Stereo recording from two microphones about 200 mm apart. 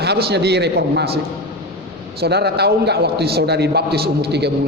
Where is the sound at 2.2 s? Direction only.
55° right (ahead or behind).